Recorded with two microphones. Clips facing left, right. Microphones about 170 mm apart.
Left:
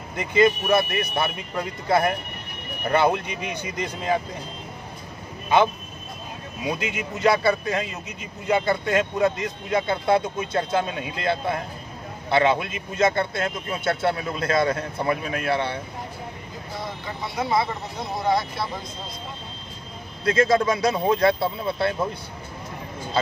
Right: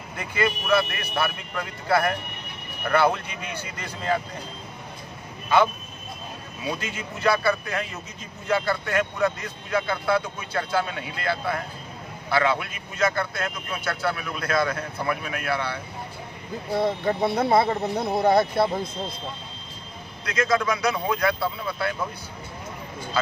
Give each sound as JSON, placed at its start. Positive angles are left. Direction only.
{"t": 0.2, "sound": "a man's voice", "side_deg": 20}
{"t": 6.6, "sound": "a man's voice", "side_deg": 15}
{"t": 16.7, "sound": "speech", "side_deg": -55}
{"t": 20.2, "sound": "a man's voice", "side_deg": 30}